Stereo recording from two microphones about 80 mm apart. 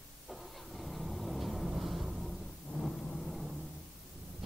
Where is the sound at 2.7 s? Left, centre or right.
Centre.